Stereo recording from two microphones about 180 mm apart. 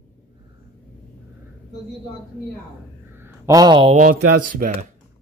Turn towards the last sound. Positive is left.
turn(degrees=-50)  # may be behind; listen again after turning